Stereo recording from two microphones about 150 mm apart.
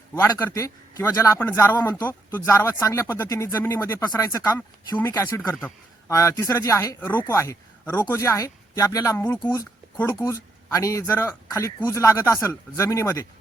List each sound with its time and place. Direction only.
0.1 s a man's voice: 15° left (ahead or behind)
9.4 s speech: 25° left (ahead or behind)